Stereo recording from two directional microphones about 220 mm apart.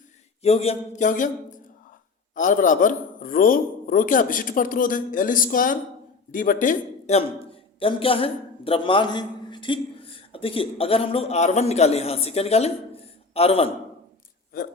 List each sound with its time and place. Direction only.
0.4 s a man's voice: 30° left (ahead or behind)